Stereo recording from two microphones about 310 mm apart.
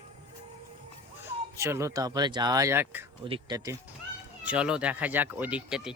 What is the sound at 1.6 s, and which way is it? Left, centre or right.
Speech, centre.